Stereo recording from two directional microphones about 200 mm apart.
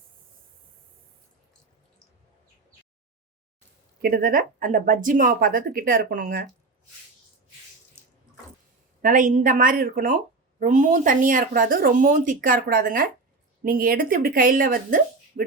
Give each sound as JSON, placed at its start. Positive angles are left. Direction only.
{"t": 4.0, "sound": "speech", "side_deg": -45}
{"t": 9.0, "sound": "speech", "side_deg": -40}